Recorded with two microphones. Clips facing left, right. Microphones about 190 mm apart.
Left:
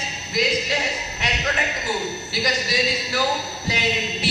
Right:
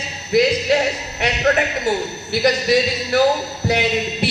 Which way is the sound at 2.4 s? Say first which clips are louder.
Right 8 dB; 60° right (ahead or behind).